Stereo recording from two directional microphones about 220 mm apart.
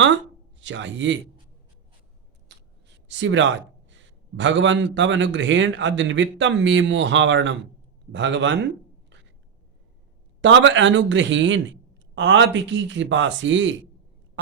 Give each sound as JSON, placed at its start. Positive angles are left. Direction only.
{"t": 0.6, "sound": "a man's voice", "side_deg": -55}
{"t": 3.1, "sound": "a man's voice", "side_deg": -55}
{"t": 10.4, "sound": "a man's voice", "side_deg": -55}